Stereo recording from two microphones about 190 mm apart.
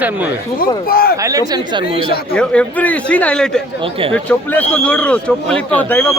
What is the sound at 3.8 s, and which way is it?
Speech, 30° right (ahead or behind).